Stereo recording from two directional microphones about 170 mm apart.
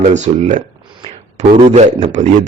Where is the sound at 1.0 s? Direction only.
40° right (ahead or behind).